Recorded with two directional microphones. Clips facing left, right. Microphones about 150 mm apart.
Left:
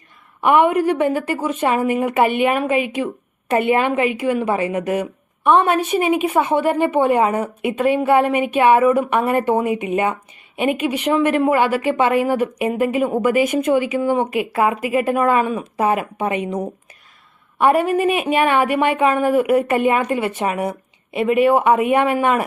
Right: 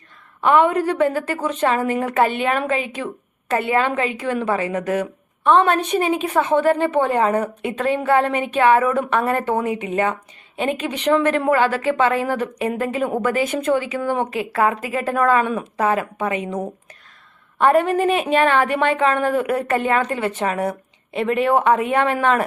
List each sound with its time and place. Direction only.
0.4 s a woman's voice: 15° left (ahead or behind)
17.6 s a woman's voice: 10° left (ahead or behind)